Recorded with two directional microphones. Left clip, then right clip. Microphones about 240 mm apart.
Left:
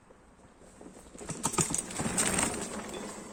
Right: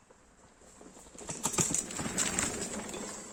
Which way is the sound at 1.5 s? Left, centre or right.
Centre.